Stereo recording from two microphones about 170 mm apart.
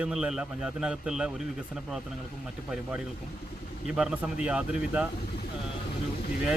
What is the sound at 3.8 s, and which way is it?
A man's voice, 5° right (ahead or behind).